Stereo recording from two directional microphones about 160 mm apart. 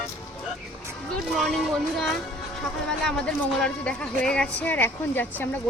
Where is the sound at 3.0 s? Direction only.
5° left (ahead or behind).